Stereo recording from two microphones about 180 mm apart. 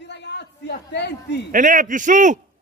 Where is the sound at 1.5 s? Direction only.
45° right (ahead or behind).